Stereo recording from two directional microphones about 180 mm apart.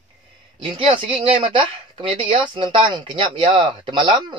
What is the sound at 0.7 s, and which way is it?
Speech, 30° right (ahead or behind).